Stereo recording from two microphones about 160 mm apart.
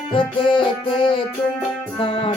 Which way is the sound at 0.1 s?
30° left (ahead or behind).